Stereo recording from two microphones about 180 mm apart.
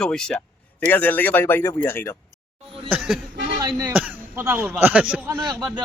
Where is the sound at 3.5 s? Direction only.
20° right (ahead or behind).